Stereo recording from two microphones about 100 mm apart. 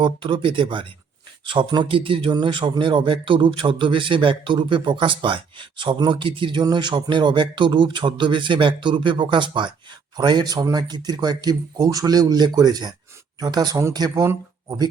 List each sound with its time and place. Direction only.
0.0 s speech: 55° right (ahead or behind)
14.2 s speech: 30° right (ahead or behind)